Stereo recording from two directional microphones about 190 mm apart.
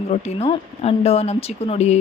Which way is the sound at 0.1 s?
35° left (ahead or behind).